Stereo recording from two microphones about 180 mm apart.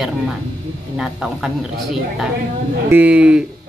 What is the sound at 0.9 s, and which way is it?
Speech, 5° right (ahead or behind).